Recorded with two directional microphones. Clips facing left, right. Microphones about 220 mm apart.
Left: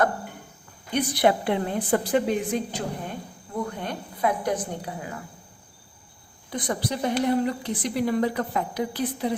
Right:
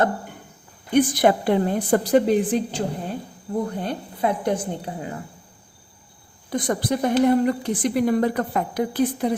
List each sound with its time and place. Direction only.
0.9 s a woman's voice: 45° right (ahead or behind); by 5.2 s 30° right (ahead or behind)
6.5 s a woman's voice: 45° right (ahead or behind)